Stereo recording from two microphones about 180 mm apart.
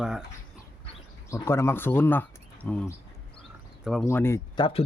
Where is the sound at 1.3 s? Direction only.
15° left (ahead or behind); by 4.1 s centre (ahead or behind).